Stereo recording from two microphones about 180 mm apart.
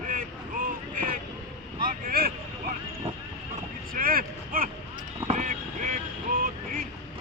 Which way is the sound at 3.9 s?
55° right (ahead or behind).